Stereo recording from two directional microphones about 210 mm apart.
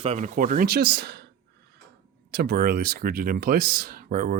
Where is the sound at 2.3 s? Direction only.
50° right (ahead or behind).